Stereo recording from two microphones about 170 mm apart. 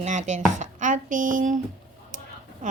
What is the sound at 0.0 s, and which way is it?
A woman's voice, 45° right (ahead or behind).